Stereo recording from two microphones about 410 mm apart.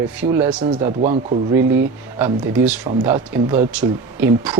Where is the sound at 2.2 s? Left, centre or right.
Centre.